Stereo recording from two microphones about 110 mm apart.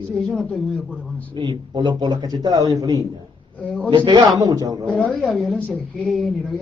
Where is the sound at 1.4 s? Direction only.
45° right (ahead or behind).